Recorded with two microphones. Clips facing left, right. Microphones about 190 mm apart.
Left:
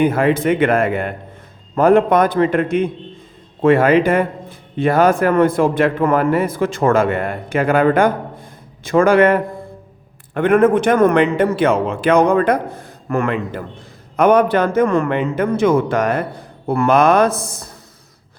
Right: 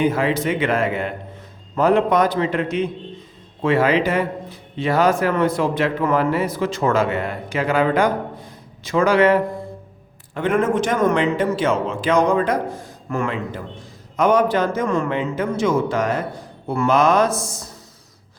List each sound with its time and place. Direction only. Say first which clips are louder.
0.0 s a man's voice: left 4 dB; 55° left (ahead or behind)